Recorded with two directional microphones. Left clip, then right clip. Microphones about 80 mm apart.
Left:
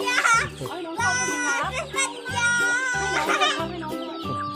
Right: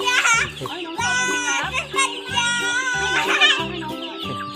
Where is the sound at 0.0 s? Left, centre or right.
Left.